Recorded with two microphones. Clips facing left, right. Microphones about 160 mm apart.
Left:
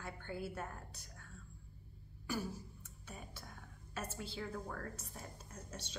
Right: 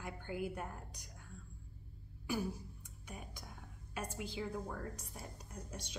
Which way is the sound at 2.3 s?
15° right (ahead or behind).